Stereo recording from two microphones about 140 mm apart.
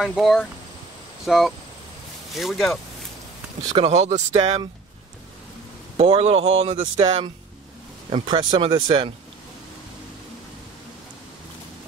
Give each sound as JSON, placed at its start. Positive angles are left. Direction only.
{"t": 0.0, "sound": "speech", "side_deg": 0}
{"t": 3.6, "sound": "speech", "side_deg": -45}
{"t": 5.9, "sound": "speech", "side_deg": -45}